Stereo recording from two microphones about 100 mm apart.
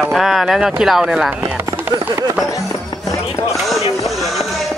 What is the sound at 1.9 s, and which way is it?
Speech, 40° right (ahead or behind).